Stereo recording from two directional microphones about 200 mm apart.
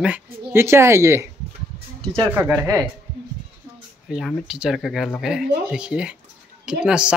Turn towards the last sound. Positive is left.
turn(degrees=-5)  # may be behind; listen again after turning